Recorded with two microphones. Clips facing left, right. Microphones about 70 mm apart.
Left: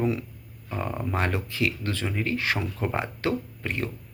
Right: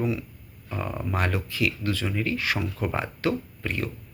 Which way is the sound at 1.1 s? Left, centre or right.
Left.